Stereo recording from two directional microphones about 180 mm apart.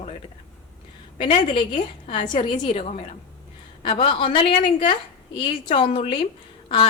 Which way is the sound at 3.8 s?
30° left (ahead or behind).